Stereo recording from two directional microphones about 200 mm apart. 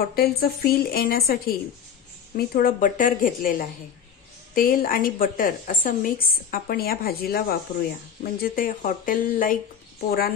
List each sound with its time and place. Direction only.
0.1 s a woman's voice: 50° left (ahead or behind)